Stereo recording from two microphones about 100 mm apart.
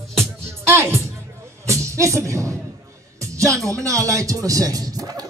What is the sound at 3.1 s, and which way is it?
Music, 30° right (ahead or behind).